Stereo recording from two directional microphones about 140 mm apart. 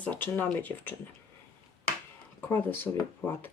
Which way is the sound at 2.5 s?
15° left (ahead or behind).